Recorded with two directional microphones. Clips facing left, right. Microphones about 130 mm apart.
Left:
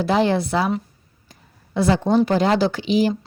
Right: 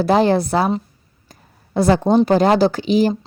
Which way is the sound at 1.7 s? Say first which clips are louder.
Right 3 dB; 40° right (ahead or behind).